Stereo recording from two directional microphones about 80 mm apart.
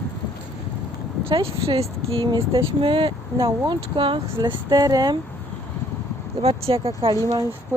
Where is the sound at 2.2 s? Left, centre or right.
Right.